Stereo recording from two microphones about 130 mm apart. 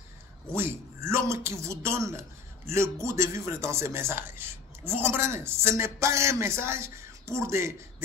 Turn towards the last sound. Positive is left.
turn(degrees=-20)  # may be behind; listen again after turning